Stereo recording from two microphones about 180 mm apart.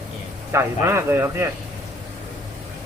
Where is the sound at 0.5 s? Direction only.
15° right (ahead or behind).